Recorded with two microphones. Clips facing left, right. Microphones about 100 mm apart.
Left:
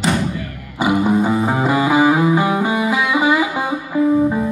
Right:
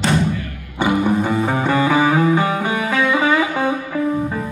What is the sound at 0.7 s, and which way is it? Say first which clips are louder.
Music: left 1 dB; 15° left (ahead or behind).